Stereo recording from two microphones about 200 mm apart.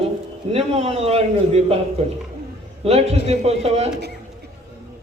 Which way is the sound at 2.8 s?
30° right (ahead or behind).